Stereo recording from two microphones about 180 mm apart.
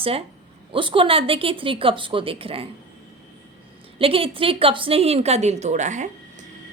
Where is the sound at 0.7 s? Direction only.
30° right (ahead or behind).